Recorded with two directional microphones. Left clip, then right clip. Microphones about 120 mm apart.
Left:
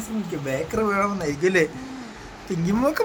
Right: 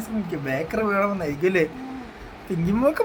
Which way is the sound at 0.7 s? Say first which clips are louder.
Even; 10° right (ahead or behind).